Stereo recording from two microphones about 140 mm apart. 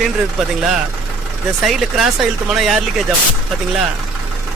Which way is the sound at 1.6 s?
5° right (ahead or behind).